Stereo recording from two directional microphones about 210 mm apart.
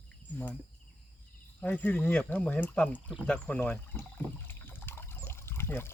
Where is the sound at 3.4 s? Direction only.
5° left (ahead or behind).